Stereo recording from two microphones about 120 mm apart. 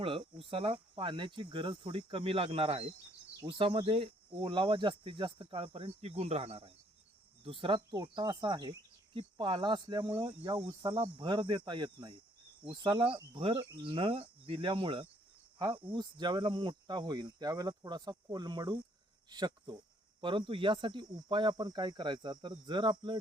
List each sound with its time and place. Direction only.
0.0 s speech: 50° right (ahead or behind)